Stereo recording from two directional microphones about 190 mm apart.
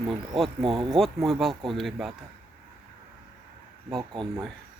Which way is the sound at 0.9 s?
Centre (ahead or behind).